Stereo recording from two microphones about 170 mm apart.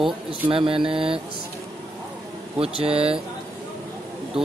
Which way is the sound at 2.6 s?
35° right (ahead or behind).